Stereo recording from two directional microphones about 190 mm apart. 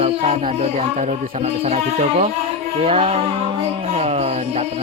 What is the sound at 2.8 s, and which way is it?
Speech, 30° right (ahead or behind).